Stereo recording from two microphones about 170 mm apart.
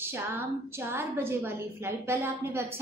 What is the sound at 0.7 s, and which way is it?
A woman's voice, 15° right (ahead or behind).